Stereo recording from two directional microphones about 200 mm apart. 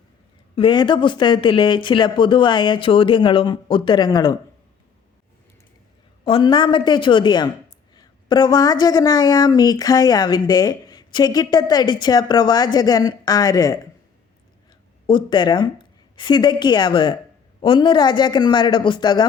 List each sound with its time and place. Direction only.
0.5 s speech: 25° left (ahead or behind)
6.2 s speech: 25° left (ahead or behind)
15.0 s a woman's voice: 25° left (ahead or behind)